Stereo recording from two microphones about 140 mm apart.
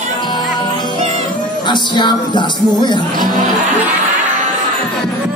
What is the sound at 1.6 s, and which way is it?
Music, 35° left (ahead or behind).